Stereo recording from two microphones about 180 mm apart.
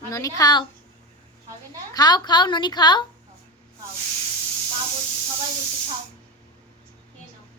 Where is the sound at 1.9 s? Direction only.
25° left (ahead or behind).